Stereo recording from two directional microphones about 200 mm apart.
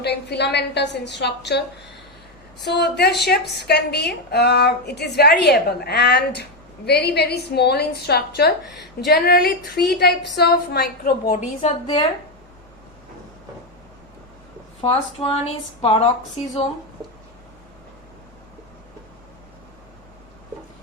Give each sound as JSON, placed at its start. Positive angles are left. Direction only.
{"t": 0.0, "sound": "a woman's voice", "side_deg": 55}
{"t": 11.6, "sound": "a woman's voice", "side_deg": 25}
{"t": 14.8, "sound": "a woman's voice", "side_deg": 30}